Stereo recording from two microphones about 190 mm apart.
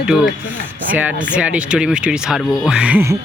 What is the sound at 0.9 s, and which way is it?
Speech, 5° right (ahead or behind).